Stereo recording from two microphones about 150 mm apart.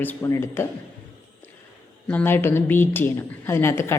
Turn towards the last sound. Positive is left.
turn(degrees=15)  # may be behind; listen again after turning